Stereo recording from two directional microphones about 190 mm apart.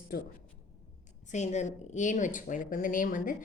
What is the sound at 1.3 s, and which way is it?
A woman's voice, 35° left (ahead or behind).